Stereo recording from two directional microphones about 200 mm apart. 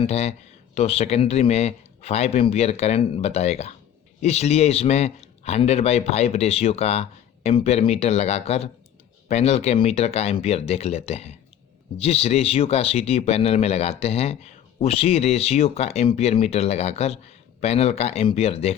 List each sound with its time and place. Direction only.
0.0 s speech: 30° left (ahead or behind)